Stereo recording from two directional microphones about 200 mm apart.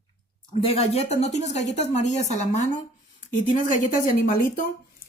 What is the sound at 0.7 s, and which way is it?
A woman's voice, 30° left (ahead or behind).